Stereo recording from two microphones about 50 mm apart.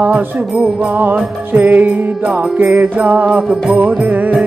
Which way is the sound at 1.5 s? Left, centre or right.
Right.